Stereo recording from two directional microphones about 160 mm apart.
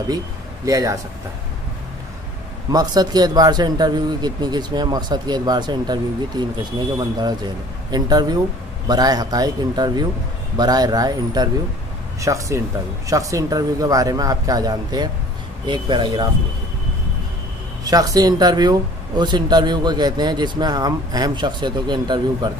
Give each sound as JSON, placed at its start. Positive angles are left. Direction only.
{"t": 0.7, "sound": "speech", "side_deg": -20}
{"t": 2.7, "sound": "speech", "side_deg": -25}
{"t": 17.8, "sound": "speech", "side_deg": -25}